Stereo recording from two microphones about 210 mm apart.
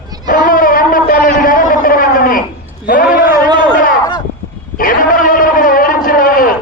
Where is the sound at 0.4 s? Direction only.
40° left (ahead or behind).